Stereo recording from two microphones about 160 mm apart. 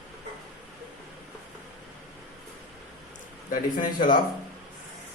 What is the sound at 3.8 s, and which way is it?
Speech, 60° left (ahead or behind).